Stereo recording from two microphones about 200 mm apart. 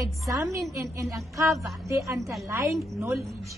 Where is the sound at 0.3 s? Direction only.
15° right (ahead or behind).